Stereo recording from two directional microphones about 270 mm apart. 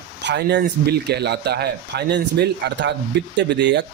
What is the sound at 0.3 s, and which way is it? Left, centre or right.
Speech, right.